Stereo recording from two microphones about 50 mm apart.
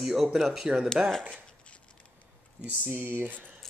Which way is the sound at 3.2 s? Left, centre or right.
Right.